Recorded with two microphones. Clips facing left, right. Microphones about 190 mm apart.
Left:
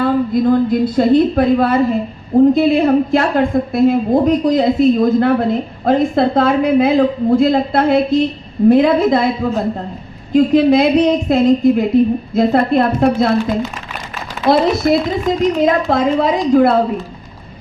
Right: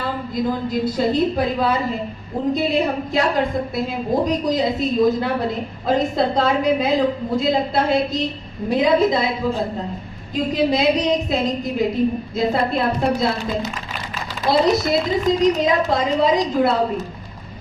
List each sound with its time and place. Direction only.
0.0 s a woman's voice: 55° left (ahead or behind)
10.3 s a woman's voice: 55° left (ahead or behind)